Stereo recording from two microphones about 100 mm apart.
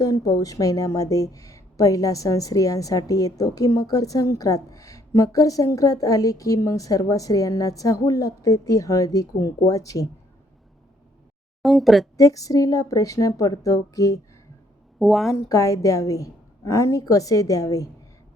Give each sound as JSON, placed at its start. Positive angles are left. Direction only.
{"t": 0.0, "sound": "a woman's voice", "side_deg": 35}
{"t": 11.6, "sound": "speech", "side_deg": 0}
{"t": 12.1, "sound": "a woman's voice", "side_deg": 35}
{"t": 14.9, "sound": "a woman's voice", "side_deg": 0}
{"t": 15.4, "sound": "a woman's voice", "side_deg": 35}